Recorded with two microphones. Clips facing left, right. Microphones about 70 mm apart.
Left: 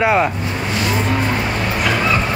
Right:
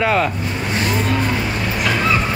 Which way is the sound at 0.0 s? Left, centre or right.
Centre.